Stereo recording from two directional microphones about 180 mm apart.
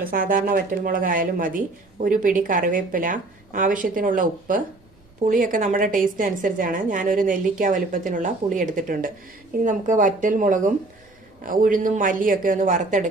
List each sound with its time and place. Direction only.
0.0 s speech: 50° right (ahead or behind)